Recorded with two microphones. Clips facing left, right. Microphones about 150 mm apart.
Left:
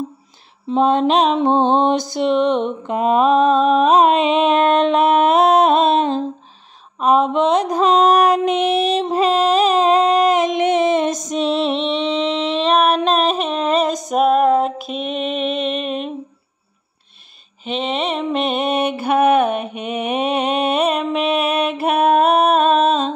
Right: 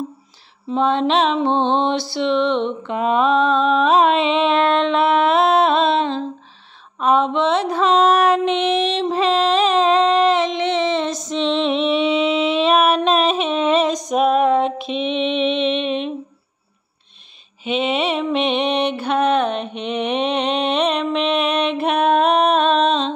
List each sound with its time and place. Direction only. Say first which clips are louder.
0.7 s mantra: left 2 dB; 40° left (ahead or behind)
11.7 s a sound: right 2 dB; centre (ahead or behind)
17.6 s mantra: right 2 dB; 5° right (ahead or behind)